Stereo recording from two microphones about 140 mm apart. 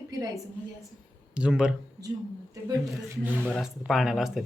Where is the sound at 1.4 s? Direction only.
5° right (ahead or behind).